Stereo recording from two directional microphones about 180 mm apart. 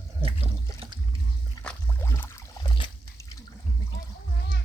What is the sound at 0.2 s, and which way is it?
Water, 30° right (ahead or behind).